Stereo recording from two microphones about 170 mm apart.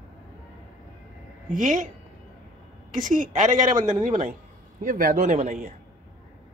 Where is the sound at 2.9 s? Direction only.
50° right (ahead or behind).